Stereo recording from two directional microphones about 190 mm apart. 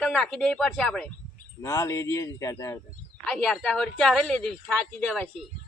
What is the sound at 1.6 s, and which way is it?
Speech, 15° left (ahead or behind).